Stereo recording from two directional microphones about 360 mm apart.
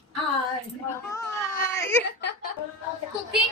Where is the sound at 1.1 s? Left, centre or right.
Centre.